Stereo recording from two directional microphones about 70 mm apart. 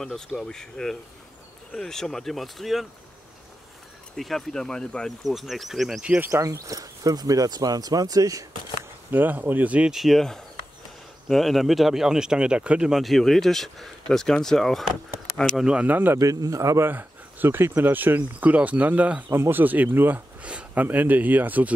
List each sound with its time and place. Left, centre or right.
0.0 s speech: centre
4.2 s speech: centre
5.2 s speech: centre
6.0 s speech: right
6.3 s speech: right
9.1 s speech: right
9.9 s speech: centre
13.0 s speech: centre
15.5 s speech: centre
16.3 s a man's voice: right
16.8 s speech: right
19.3 s speech: right
19.6 s speech: right